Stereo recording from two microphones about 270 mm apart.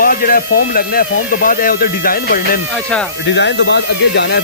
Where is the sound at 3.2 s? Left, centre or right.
Left.